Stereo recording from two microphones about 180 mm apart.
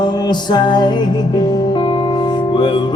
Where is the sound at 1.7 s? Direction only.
25° left (ahead or behind).